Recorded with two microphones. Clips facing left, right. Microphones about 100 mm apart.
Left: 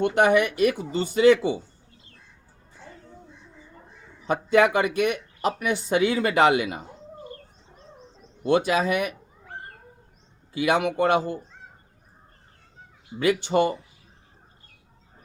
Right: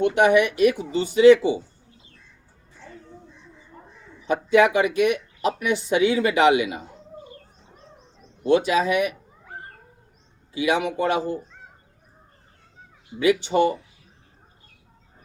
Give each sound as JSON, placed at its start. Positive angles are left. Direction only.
{"t": 0.0, "sound": "speech", "side_deg": 45}
{"t": 4.3, "sound": "speech", "side_deg": 50}
{"t": 8.4, "sound": "speech", "side_deg": 45}
{"t": 10.5, "sound": "speech", "side_deg": 50}
{"t": 13.1, "sound": "speech", "side_deg": 45}